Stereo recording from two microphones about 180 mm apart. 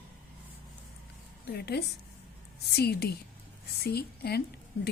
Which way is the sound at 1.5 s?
65° left (ahead or behind).